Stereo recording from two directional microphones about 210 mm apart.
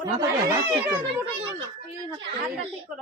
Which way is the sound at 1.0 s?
25° right (ahead or behind).